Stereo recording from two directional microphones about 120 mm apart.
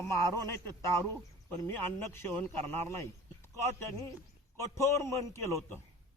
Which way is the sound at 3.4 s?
20° left (ahead or behind).